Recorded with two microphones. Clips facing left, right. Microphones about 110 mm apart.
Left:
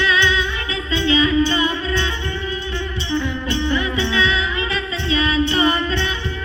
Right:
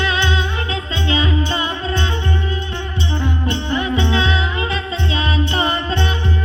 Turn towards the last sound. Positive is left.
turn(degrees=-50)  # may be behind; listen again after turning